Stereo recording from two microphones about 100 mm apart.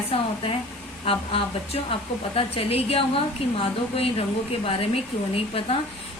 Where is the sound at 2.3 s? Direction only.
75° left (ahead or behind).